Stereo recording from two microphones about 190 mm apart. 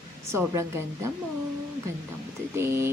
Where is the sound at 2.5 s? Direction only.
15° right (ahead or behind).